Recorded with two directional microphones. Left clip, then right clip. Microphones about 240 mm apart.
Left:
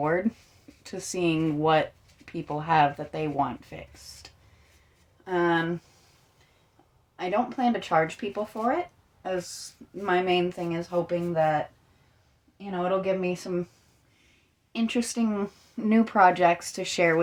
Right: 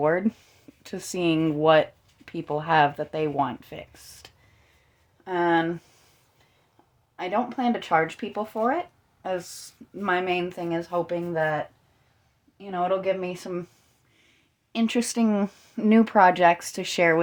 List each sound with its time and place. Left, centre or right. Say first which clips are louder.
0.0 s speech: right 3 dB; right
7.2 s speech: even; right
12.9 s speech: left 3 dB; right
14.7 s speech: right 3 dB; right